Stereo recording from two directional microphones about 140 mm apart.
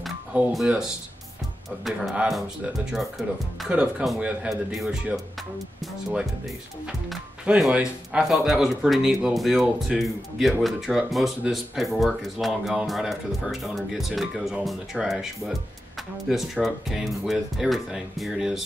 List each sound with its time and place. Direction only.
0.0 s music: centre (ahead or behind)
1.9 s speech: centre (ahead or behind)
7.1 s speech: 5° right (ahead or behind)